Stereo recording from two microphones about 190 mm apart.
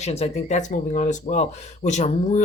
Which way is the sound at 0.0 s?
35° left (ahead or behind).